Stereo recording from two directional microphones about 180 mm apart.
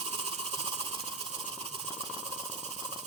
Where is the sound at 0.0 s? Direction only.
35° right (ahead or behind).